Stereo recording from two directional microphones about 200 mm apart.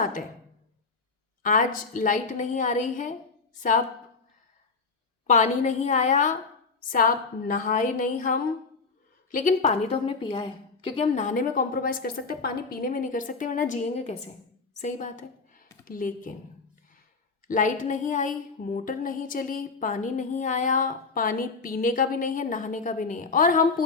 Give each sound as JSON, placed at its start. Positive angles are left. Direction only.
{"t": 1.4, "sound": "a woman's voice", "side_deg": 40}
{"t": 5.2, "sound": "a woman's voice", "side_deg": 35}
{"t": 17.5, "sound": "a woman's voice", "side_deg": 40}